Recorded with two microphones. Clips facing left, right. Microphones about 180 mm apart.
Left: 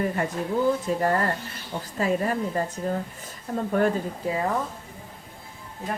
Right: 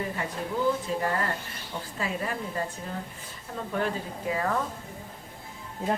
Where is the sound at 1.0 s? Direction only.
45° left (ahead or behind).